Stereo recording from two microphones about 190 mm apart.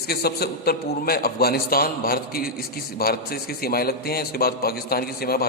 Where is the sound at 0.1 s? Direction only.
55° left (ahead or behind).